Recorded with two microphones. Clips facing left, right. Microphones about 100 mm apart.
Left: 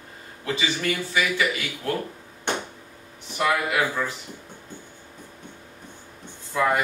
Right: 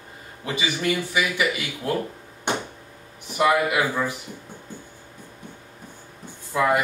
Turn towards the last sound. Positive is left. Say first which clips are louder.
# right 2 dB
turn(degrees=-10)  # may be behind; listen again after turning